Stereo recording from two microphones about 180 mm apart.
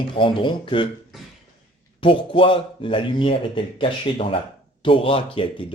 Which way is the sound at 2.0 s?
30° left (ahead or behind).